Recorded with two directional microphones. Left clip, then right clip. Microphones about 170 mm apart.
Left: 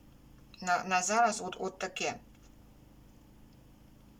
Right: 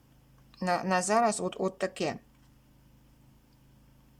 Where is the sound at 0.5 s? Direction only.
35° right (ahead or behind).